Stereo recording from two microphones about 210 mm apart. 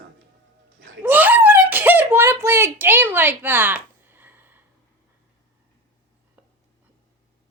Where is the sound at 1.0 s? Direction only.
10° right (ahead or behind).